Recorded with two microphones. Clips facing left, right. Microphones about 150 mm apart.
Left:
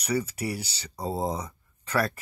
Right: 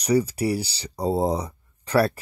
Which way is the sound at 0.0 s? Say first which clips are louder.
Right 7 dB; 35° right (ahead or behind).